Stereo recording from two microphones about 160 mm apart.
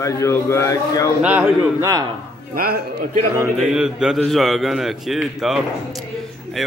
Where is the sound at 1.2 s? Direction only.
10° right (ahead or behind).